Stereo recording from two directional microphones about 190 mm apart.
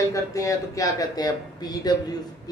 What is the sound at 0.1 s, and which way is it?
Speech, 15° left (ahead or behind).